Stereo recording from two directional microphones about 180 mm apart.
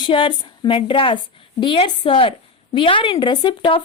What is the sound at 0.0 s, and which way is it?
A woman's voice, 25° left (ahead or behind).